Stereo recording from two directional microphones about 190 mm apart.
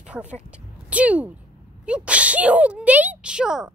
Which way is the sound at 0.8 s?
5° right (ahead or behind).